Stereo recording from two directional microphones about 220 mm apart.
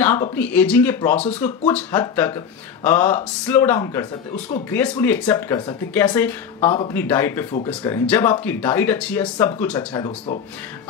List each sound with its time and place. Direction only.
0.0 s speech: 10° left (ahead or behind)
9.9 s speech: 20° left (ahead or behind)